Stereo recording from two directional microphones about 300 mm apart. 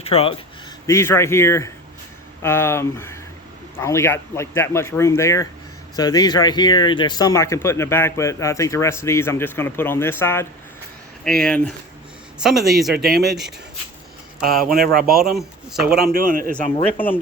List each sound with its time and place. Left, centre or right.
0.0 s speech: centre
0.9 s a man's voice: centre
14.6 s a man's voice: right
15.0 s a man's voice: centre
16.1 s a man's voice: right